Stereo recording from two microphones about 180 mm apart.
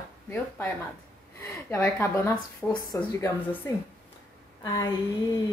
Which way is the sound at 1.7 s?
10° left (ahead or behind).